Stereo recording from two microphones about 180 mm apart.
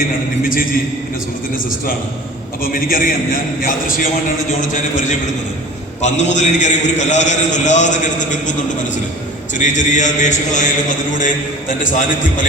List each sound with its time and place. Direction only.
3.6 s a man's voice: 50° left (ahead or behind)
9.6 s a man's voice: 45° left (ahead or behind)